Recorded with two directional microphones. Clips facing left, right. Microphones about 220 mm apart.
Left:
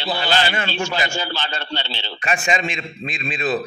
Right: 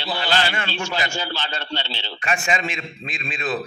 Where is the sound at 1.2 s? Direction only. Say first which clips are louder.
Left 2 dB; 60° left (ahead or behind).